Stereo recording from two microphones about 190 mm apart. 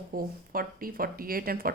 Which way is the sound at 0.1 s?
50° right (ahead or behind).